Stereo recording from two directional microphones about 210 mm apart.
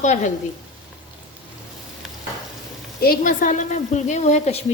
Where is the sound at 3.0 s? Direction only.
40° left (ahead or behind).